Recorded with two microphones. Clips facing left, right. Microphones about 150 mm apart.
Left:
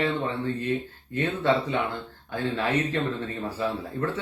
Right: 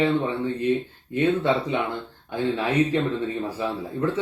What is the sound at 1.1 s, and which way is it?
Speech, 15° right (ahead or behind).